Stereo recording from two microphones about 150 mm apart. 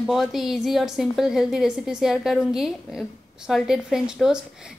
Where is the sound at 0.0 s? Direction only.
Centre (ahead or behind).